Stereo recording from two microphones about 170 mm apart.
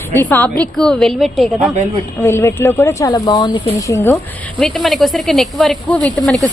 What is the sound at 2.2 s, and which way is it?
A woman's voice, 15° left (ahead or behind).